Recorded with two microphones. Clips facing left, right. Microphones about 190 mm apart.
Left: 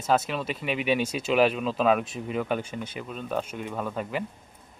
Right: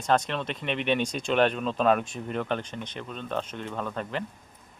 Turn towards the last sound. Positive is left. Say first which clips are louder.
# left 2 dB
turn(degrees=10)  # may be behind; listen again after turning